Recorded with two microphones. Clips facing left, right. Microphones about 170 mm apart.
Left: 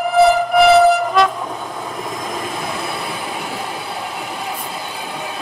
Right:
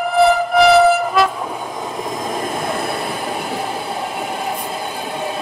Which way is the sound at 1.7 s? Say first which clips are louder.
Right 2 dB; 20° right (ahead or behind).